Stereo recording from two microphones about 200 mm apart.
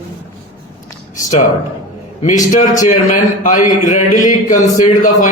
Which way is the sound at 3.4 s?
40° left (ahead or behind).